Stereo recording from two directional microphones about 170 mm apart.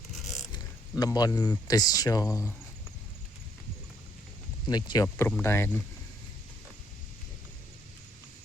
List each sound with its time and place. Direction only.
0.5 s speech: 20° left (ahead or behind)
4.6 s speech: 25° left (ahead or behind)
5.0 s speech: 15° left (ahead or behind)